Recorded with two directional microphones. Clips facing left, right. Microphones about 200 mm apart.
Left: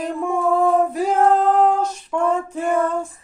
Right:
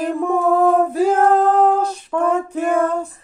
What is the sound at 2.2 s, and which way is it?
Female singing, 75° right (ahead or behind).